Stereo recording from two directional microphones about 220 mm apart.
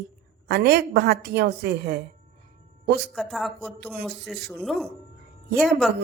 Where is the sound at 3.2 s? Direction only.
Centre (ahead or behind).